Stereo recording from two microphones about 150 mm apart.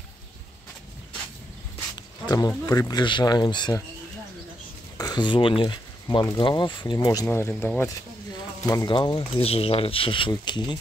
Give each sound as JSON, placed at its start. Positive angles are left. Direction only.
{"t": 2.2, "sound": "speech", "side_deg": 25}
{"t": 4.9, "sound": "speech", "side_deg": 25}
{"t": 7.2, "sound": "speech", "side_deg": 15}
{"t": 8.6, "sound": "speech", "side_deg": 25}